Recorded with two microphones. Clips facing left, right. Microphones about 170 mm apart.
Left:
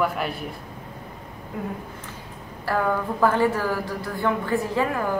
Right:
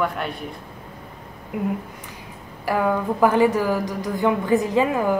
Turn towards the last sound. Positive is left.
turn(degrees=-15)  # may be behind; listen again after turning